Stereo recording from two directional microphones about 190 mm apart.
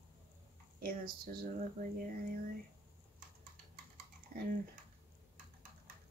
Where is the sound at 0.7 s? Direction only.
50° right (ahead or behind).